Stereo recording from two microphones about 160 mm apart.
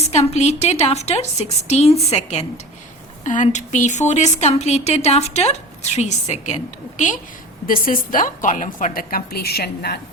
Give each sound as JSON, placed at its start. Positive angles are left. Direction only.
{"t": 0.0, "sound": "a woman's voice", "side_deg": 40}